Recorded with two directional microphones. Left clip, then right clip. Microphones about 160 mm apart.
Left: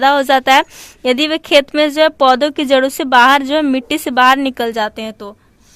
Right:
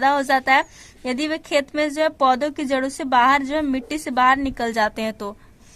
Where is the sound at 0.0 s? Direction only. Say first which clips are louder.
Left 7 dB; 25° left (ahead or behind); by 5.3 s 5° left (ahead or behind).